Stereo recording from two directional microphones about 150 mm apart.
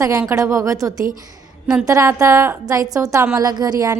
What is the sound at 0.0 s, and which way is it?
A woman's voice, 20° right (ahead or behind).